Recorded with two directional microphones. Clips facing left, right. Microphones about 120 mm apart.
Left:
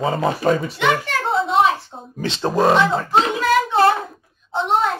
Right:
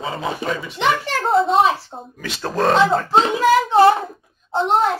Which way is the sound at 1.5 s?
30° right (ahead or behind).